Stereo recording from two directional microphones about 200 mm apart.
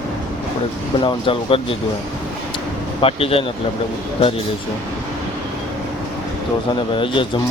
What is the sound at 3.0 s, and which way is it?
Speech, 30° left (ahead or behind).